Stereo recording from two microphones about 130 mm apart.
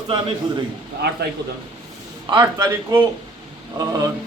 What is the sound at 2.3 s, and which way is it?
Speech, 35° right (ahead or behind).